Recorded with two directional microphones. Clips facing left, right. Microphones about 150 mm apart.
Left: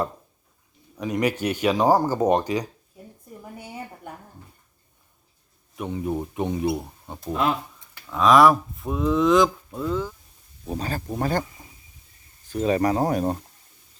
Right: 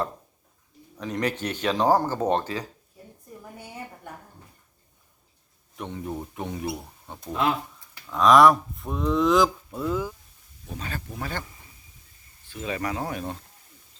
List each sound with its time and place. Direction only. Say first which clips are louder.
0.9 s speech: left 4 dB; 10° left (ahead or behind)
5.7 s speech: left 6 dB; 10° left (ahead or behind)
8.1 s speech: even; centre (ahead or behind)
10.7 s speech: left 7 dB; 35° left (ahead or behind)
12.5 s speech: left 9 dB; 40° left (ahead or behind)